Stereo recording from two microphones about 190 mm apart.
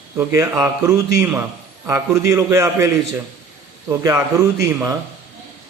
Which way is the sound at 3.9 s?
15° right (ahead or behind).